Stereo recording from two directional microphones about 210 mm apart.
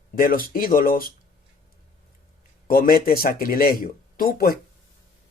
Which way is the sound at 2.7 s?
45° left (ahead or behind).